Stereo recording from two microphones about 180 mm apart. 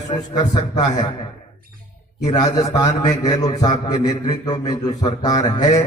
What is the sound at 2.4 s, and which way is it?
A man's voice, 20° left (ahead or behind).